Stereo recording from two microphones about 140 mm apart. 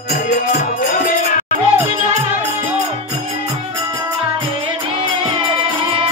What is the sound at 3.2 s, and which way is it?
Music, 35° right (ahead or behind).